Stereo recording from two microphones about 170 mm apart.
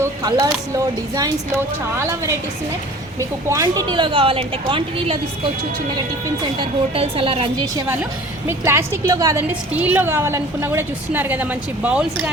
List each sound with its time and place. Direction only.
0.0 s a woman's voice: 25° right (ahead or behind)
8.4 s a woman's voice: 15° right (ahead or behind)